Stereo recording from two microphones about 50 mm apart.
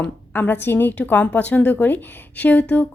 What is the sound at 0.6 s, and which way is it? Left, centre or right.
Speech, left.